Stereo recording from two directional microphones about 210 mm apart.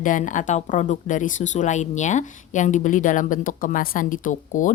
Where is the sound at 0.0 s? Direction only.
40° left (ahead or behind).